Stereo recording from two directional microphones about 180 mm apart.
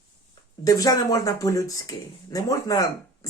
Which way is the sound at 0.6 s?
20° left (ahead or behind).